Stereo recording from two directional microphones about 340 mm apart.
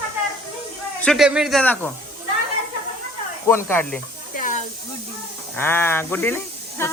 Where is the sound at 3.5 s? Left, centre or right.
Centre.